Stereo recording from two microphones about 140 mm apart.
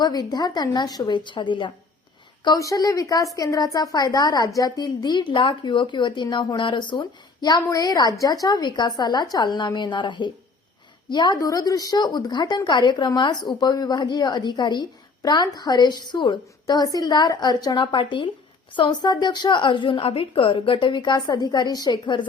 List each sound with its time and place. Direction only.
0.0 s a woman's voice: 30° left (ahead or behind)